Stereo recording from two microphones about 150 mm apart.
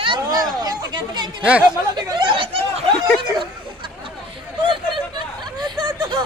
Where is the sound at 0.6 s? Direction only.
25° right (ahead or behind).